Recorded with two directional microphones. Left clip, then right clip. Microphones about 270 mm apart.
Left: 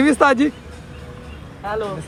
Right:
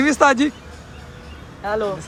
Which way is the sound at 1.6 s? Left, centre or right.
Right.